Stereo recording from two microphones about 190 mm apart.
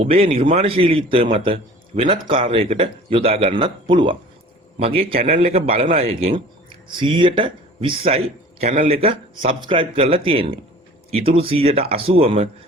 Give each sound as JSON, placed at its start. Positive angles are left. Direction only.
{"t": 0.0, "sound": "a man's voice", "side_deg": -30}